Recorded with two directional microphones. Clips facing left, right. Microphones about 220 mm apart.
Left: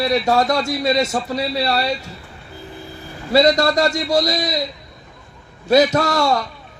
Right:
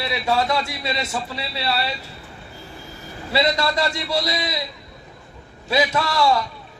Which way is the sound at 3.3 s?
45° left (ahead or behind).